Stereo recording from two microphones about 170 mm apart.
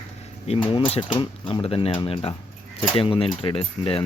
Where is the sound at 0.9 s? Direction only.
30° left (ahead or behind).